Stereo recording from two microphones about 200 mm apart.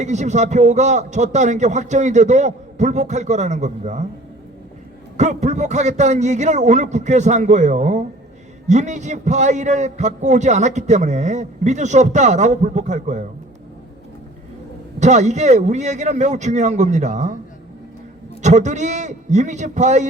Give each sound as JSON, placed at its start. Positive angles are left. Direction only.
{"t": 0.0, "sound": "a man's voice", "side_deg": -35}
{"t": 5.1, "sound": "a man's voice", "side_deg": -35}
{"t": 14.9, "sound": "a man's voice", "side_deg": -35}
{"t": 18.4, "sound": "a man's voice", "side_deg": -35}